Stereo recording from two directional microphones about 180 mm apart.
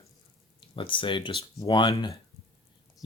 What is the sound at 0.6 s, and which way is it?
Speech, 25° left (ahead or behind).